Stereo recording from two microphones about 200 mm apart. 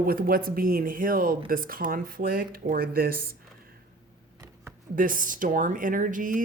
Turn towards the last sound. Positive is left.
turn(degrees=-40)  # may be behind; listen again after turning